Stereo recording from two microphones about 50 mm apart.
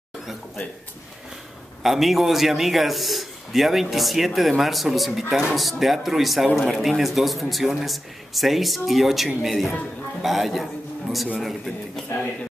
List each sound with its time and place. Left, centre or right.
1.8 s a man's voice: centre
12.1 s speech: left